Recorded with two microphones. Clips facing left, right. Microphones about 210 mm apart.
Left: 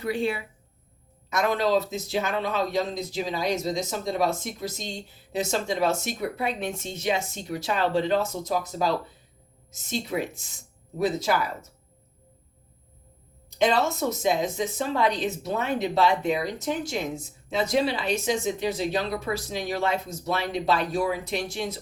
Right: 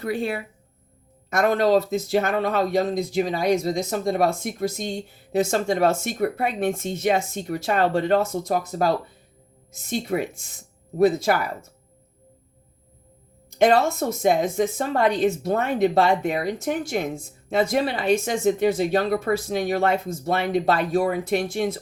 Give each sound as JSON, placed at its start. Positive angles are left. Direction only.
{"t": 0.0, "sound": "speech", "side_deg": -55}
{"t": 13.6, "sound": "speech", "side_deg": -55}